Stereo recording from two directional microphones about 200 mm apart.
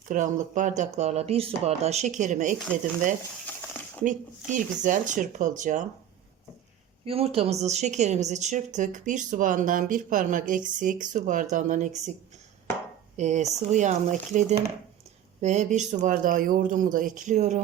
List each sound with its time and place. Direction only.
0.1 s a woman's voice: 40° right (ahead or behind)
4.0 s a woman's voice: 40° right (ahead or behind)
7.0 s a woman's voice: 30° right (ahead or behind)
13.1 s a woman's voice: 35° right (ahead or behind)